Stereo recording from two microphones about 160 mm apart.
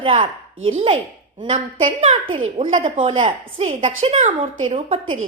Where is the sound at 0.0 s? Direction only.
35° right (ahead or behind).